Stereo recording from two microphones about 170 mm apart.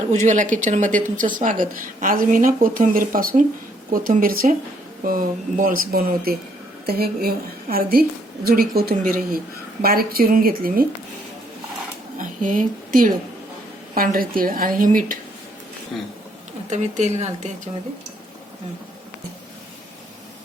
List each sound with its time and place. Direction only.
0.1 s speech: 45° right (ahead or behind)
12.1 s a woman's voice: 50° right (ahead or behind)
16.6 s speech: 45° right (ahead or behind)